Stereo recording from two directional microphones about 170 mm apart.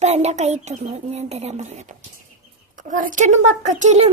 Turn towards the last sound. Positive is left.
turn(degrees=-40)  # may be behind; listen again after turning